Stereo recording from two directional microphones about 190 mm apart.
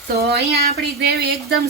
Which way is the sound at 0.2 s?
60° right (ahead or behind).